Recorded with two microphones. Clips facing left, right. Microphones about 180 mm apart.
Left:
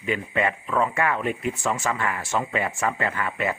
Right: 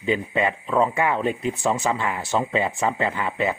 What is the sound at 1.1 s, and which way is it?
Speech, 30° right (ahead or behind).